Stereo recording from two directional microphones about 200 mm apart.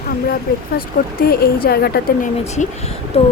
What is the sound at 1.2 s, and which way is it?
A woman's voice, 50° left (ahead or behind).